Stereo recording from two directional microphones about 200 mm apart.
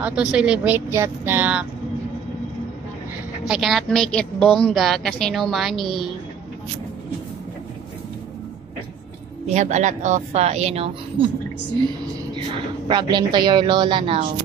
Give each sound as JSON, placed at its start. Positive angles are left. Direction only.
{"t": 0.0, "sound": "speech", "side_deg": -5}
{"t": 3.4, "sound": "a woman's voice", "side_deg": 0}
{"t": 9.5, "sound": "speech", "side_deg": -35}
{"t": 12.9, "sound": "speech", "side_deg": -20}